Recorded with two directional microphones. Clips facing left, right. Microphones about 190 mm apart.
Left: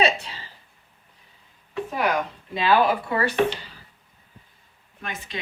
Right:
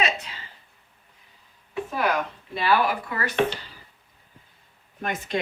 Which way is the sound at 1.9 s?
15° left (ahead or behind).